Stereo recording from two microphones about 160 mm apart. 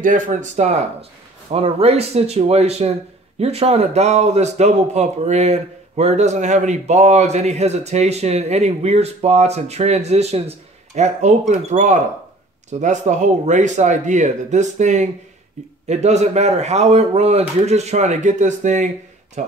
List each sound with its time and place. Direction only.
0.0 s speech: 55° right (ahead or behind)